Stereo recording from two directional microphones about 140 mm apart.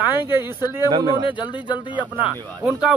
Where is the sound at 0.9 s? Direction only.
35° right (ahead or behind).